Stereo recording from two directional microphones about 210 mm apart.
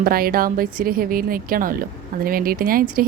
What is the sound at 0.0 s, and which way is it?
A woman's voice, 45° right (ahead or behind).